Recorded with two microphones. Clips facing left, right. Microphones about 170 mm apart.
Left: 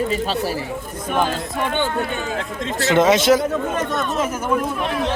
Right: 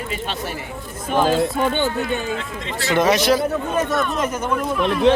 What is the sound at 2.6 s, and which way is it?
Speech, 45° left (ahead or behind).